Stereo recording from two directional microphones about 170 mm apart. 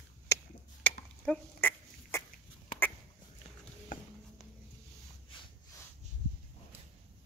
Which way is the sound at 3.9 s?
50° left (ahead or behind).